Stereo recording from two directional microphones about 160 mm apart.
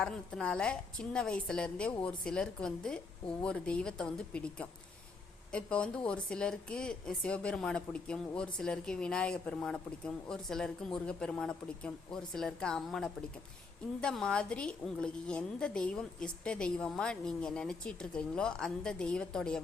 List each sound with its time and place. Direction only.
0.0 s a woman's voice: 5° left (ahead or behind)